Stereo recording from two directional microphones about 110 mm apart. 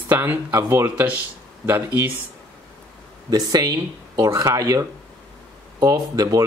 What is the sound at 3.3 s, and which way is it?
Speech, 35° right (ahead or behind).